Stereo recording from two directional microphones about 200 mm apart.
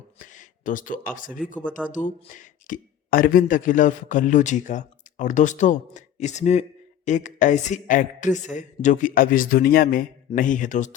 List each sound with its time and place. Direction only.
0.2 s speech: 40° left (ahead or behind)
1.5 s speech: 5° left (ahead or behind)
1.9 s speech: 40° left (ahead or behind)